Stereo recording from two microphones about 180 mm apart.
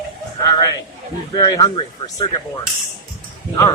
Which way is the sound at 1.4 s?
20° left (ahead or behind).